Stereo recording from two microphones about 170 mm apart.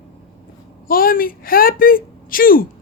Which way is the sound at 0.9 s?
55° left (ahead or behind).